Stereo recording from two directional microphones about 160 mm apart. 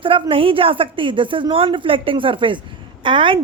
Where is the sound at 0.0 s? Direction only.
35° right (ahead or behind).